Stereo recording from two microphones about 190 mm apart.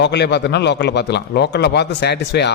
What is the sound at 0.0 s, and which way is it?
A man's voice, 65° left (ahead or behind).